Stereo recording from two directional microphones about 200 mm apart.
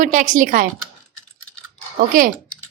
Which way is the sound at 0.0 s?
40° right (ahead or behind).